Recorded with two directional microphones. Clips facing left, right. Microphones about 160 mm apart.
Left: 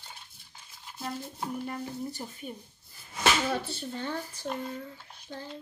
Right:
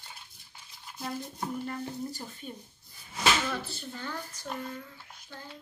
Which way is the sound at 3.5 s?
35° left (ahead or behind).